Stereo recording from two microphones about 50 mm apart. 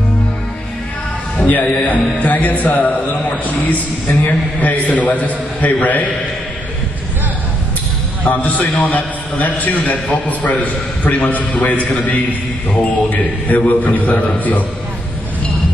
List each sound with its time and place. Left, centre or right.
1.5 s a man's voice: left
8.2 s a man's voice: left